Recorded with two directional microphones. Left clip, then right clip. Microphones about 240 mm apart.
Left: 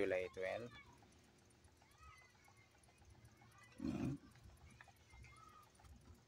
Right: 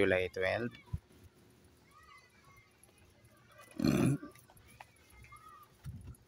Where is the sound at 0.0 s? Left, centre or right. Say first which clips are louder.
Right 10 dB; right.